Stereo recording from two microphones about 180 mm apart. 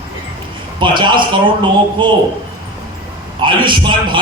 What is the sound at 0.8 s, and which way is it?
A man's voice, 25° right (ahead or behind).